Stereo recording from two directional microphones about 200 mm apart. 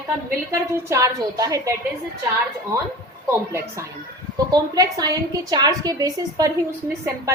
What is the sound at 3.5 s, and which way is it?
A woman's voice, 15° right (ahead or behind).